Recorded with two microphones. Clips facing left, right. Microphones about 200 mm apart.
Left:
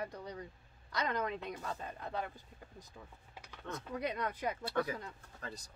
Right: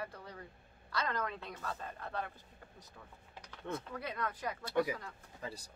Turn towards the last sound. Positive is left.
turn(degrees=-5)  # may be behind; listen again after turning